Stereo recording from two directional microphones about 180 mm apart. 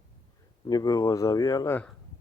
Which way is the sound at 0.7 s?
20° left (ahead or behind).